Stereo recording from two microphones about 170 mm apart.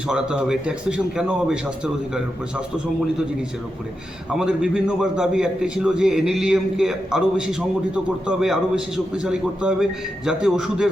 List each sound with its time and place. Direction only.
0.1 s a man's voice: 5° right (ahead or behind)
4.3 s a man's voice: 5° right (ahead or behind)